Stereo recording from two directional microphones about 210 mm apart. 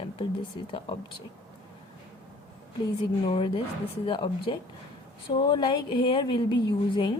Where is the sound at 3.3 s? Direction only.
25° left (ahead or behind).